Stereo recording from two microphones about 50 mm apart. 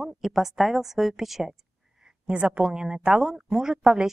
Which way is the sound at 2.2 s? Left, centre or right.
Right.